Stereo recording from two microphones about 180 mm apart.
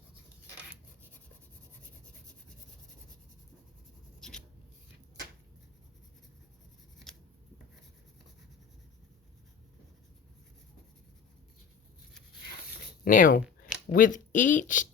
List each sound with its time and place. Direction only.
4.2 s writing: 5° left (ahead or behind)
13.1 s speech: 50° left (ahead or behind)